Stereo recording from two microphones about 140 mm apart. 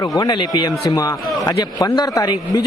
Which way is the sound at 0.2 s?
30° left (ahead or behind).